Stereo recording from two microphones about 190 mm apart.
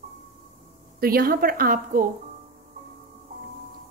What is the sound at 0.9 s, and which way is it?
A woman's voice, 50° right (ahead or behind).